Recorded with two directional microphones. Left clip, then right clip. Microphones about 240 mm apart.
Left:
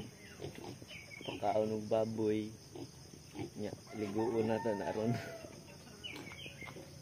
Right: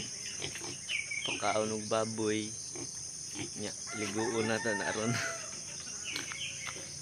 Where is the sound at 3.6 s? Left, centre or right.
Centre.